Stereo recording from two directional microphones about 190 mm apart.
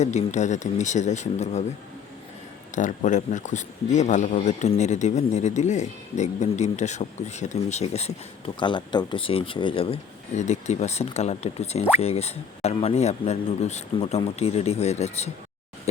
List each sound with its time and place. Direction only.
0.0 s speech: 35° left (ahead or behind)
2.7 s speech: 40° left (ahead or behind)